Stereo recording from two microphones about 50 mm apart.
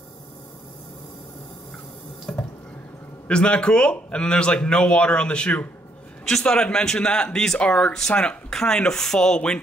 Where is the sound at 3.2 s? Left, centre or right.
Left.